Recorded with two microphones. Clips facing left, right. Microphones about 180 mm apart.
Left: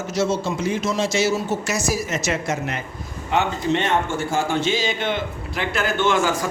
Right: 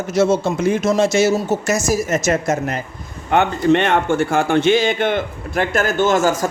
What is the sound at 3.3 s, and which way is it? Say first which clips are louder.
A man's voice: right 6 dB; 60° right (ahead or behind).